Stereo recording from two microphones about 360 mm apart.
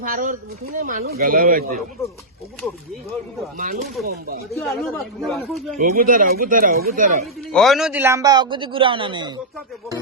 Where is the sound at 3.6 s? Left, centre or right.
Right.